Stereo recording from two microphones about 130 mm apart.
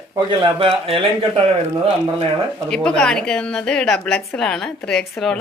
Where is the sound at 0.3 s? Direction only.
40° right (ahead or behind).